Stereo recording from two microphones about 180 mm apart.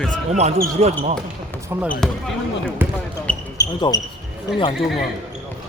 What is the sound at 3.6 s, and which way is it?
Speech, 20° left (ahead or behind).